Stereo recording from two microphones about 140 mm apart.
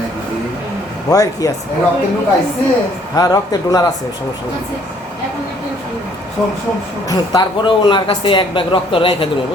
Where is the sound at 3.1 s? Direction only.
25° left (ahead or behind).